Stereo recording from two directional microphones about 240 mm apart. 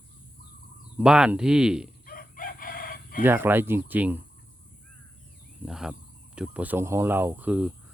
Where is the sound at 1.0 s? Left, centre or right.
Centre.